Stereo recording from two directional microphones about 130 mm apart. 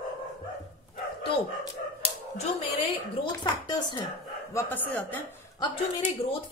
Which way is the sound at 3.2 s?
35° left (ahead or behind).